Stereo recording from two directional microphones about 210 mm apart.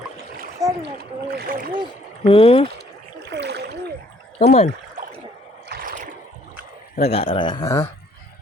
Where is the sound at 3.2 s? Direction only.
55° right (ahead or behind).